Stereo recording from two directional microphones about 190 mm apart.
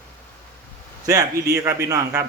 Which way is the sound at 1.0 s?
20° right (ahead or behind).